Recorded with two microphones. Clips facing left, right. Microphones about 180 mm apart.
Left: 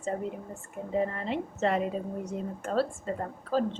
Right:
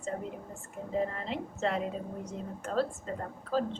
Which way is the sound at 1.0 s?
5° left (ahead or behind).